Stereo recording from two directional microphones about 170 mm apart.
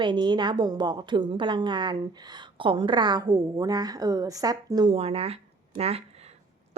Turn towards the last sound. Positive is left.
turn(degrees=-35)  # may be behind; listen again after turning